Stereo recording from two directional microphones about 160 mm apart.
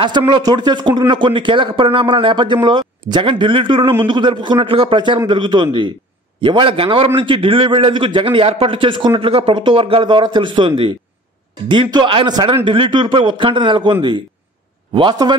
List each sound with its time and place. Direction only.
0.0 s a man's voice: 30° right (ahead or behind)
11.7 s speech: 30° right (ahead or behind)
15.0 s a man's voice: 30° right (ahead or behind)